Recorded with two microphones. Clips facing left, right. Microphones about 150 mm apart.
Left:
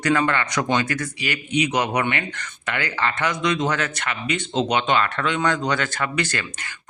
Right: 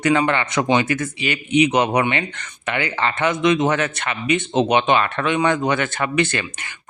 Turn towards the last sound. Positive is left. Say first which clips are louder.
# right 5 dB
turn(degrees=-25)  # may be behind; listen again after turning